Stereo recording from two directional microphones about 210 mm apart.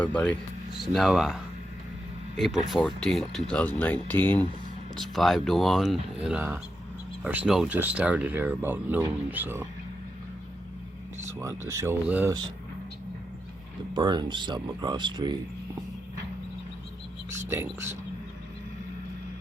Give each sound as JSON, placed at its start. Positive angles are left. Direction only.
{"t": 0.0, "sound": "speech", "side_deg": 5}
{"t": 11.3, "sound": "speech", "side_deg": -15}
{"t": 13.9, "sound": "speech", "side_deg": -20}
{"t": 17.5, "sound": "speech", "side_deg": -10}